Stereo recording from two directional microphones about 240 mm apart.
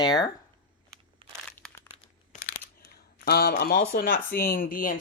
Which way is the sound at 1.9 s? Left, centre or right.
Left.